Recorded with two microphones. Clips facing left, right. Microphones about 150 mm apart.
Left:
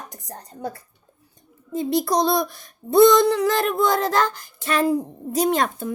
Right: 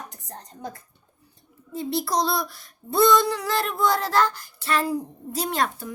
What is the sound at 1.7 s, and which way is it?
Child singing, 20° left (ahead or behind).